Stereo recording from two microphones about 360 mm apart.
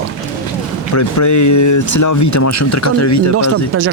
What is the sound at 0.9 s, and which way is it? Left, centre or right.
Speech, left.